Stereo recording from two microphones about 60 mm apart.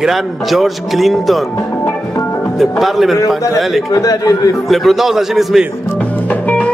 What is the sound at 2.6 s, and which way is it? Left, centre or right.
Speech, centre.